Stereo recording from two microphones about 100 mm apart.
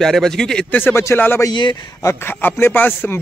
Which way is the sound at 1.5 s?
45° left (ahead or behind).